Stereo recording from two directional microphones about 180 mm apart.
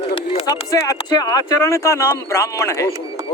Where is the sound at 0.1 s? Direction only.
25° left (ahead or behind).